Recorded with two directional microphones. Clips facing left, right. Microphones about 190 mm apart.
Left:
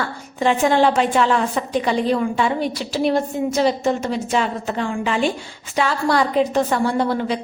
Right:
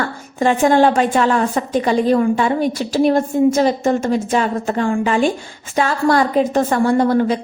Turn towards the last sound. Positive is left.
turn(degrees=-45)  # may be behind; listen again after turning